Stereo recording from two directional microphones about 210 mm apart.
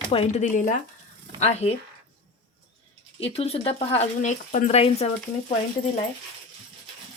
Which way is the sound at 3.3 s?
30° left (ahead or behind).